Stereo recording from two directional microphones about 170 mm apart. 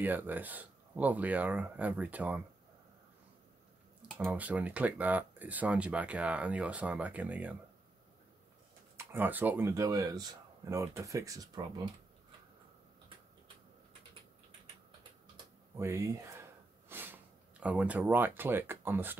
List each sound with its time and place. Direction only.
0.0 s speech: 10° right (ahead or behind)
4.2 s speech: 5° right (ahead or behind)
8.9 s speech: 10° right (ahead or behind)
15.3 s a sound: 15° right (ahead or behind)
16.9 s speech: 10° right (ahead or behind)